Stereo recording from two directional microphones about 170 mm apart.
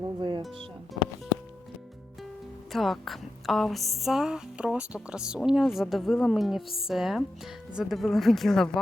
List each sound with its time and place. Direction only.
0.2 s music: 25° right (ahead or behind)
2.7 s speech: centre (ahead or behind)